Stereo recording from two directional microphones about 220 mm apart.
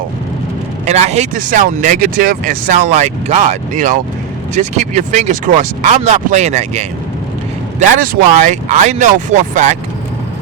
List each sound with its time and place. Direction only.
0.9 s speech: 30° right (ahead or behind)